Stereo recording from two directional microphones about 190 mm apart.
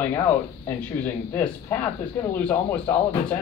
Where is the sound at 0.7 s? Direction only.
10° left (ahead or behind).